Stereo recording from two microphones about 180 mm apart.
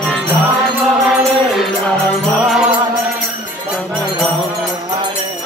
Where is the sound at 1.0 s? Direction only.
Centre (ahead or behind).